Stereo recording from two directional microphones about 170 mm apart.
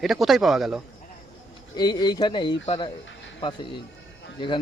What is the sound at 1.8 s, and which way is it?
Speech, 25° left (ahead or behind).